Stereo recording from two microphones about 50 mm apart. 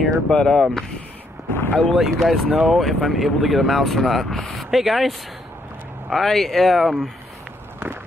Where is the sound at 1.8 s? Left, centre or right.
Centre.